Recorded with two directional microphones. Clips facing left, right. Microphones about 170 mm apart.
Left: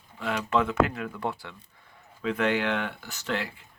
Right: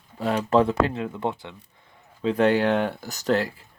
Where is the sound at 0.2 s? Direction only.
35° right (ahead or behind); by 1.5 s 20° right (ahead or behind).